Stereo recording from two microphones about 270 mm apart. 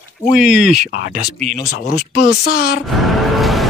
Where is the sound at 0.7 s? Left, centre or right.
Left.